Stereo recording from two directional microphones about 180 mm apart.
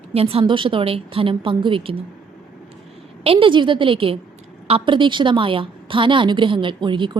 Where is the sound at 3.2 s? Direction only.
30° right (ahead or behind).